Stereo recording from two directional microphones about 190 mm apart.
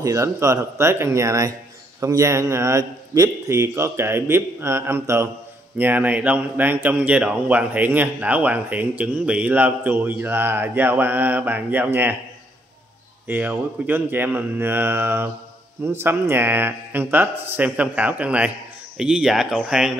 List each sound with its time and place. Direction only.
0.0 s speech: 15° right (ahead or behind)
13.3 s speech: 10° right (ahead or behind)